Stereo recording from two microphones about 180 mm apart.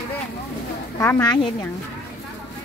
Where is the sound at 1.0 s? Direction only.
20° left (ahead or behind).